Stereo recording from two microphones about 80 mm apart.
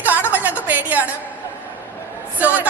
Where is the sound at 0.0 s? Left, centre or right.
Right.